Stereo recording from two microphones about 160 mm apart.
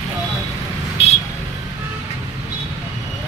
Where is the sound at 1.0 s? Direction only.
40° left (ahead or behind).